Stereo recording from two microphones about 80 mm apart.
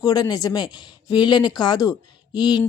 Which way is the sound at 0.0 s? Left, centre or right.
Left.